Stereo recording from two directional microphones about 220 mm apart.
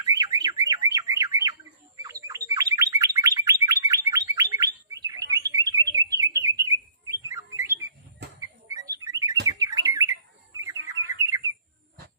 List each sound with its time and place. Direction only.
0.0 s bird: 15° right (ahead or behind)
8.4 s a sound: 15° right (ahead or behind)
9.5 s bird: 15° right (ahead or behind)
11.2 s bird: 15° right (ahead or behind)